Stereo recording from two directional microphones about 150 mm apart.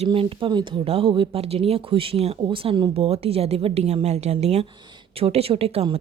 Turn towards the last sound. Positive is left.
turn(degrees=-40)  # may be behind; listen again after turning